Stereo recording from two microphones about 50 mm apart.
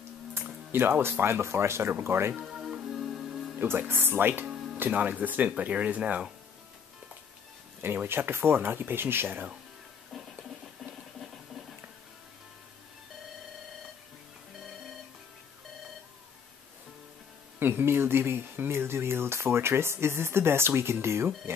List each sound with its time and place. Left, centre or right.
0.3 s speech: right
2.4 s music: centre
3.0 s music: centre
3.5 s speech: right
7.8 s speech: right
10.1 s a sound: centre
17.6 s speech: right